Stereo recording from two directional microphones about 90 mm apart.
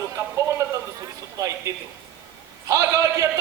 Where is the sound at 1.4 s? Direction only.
35° right (ahead or behind).